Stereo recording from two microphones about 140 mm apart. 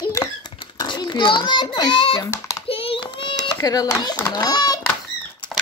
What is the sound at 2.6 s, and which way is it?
Child singing, 40° left (ahead or behind).